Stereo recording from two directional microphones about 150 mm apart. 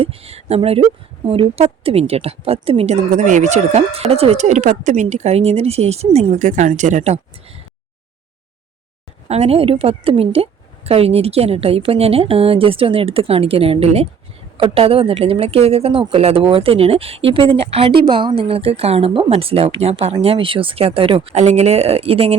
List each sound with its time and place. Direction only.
0.0 s a woman's voice: 40° right (ahead or behind)
9.3 s speech: 40° right (ahead or behind)